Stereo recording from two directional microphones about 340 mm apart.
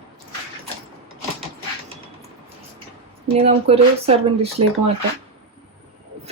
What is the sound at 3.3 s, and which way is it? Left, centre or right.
Speech, centre.